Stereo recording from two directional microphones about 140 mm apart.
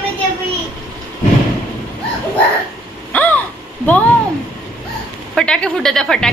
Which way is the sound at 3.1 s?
10° left (ahead or behind).